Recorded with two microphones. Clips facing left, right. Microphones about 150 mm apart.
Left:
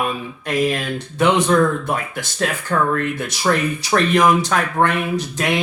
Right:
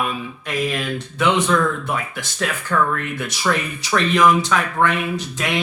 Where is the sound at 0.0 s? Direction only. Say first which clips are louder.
Left 2 dB; 40° left (ahead or behind).